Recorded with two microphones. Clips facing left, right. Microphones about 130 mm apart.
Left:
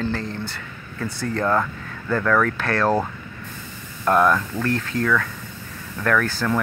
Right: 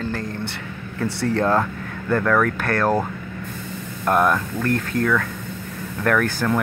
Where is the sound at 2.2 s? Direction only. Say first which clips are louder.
Left 1 dB; 10° right (ahead or behind).